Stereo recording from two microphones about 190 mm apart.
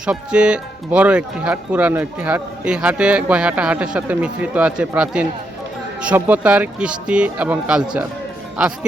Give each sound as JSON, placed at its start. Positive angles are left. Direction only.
{"t": 0.0, "sound": "speech", "side_deg": -5}